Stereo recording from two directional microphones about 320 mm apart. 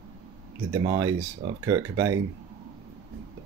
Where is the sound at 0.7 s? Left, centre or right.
Centre.